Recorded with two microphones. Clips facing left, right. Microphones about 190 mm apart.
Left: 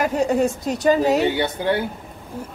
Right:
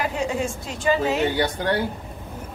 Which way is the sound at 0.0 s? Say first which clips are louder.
Left 6 dB; 40° left (ahead or behind).